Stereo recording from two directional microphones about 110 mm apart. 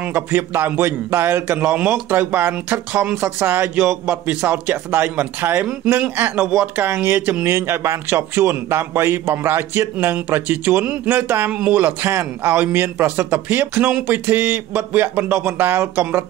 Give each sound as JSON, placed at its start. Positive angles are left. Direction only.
{"t": 0.0, "sound": "speech", "side_deg": -20}
{"t": 6.4, "sound": "speech", "side_deg": -5}
{"t": 6.8, "sound": "speech", "side_deg": -20}